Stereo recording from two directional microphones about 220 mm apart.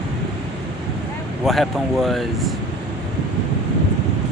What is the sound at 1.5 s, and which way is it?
Speech, centre (ahead or behind).